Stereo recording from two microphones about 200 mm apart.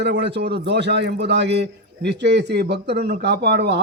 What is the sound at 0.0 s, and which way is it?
Speech, 60° right (ahead or behind).